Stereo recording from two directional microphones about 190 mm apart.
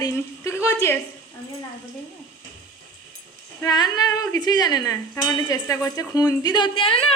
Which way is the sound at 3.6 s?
20° left (ahead or behind).